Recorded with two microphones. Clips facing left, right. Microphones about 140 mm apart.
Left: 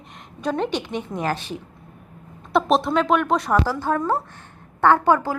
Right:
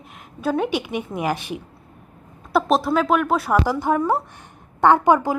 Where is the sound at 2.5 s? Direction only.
Centre (ahead or behind).